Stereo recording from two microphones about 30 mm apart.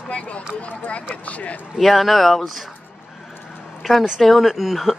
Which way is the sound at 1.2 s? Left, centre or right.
Left.